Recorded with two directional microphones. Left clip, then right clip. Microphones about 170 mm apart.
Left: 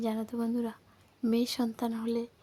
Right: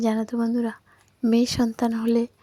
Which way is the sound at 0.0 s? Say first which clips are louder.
Right 9 dB; 35° right (ahead or behind).